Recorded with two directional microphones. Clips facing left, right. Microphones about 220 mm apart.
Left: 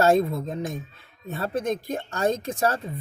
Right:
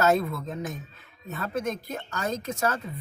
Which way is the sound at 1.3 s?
35° left (ahead or behind).